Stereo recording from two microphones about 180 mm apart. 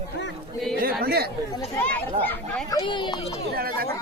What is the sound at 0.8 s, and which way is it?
Speech, 55° right (ahead or behind).